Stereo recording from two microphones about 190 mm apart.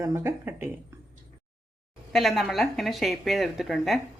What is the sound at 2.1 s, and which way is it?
Speech, centre (ahead or behind).